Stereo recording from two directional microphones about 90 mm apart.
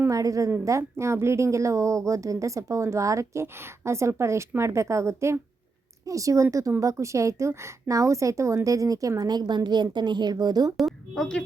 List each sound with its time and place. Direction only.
0.1 s a woman's voice: 40° right (ahead or behind)
10.8 s a woman's voice: centre (ahead or behind)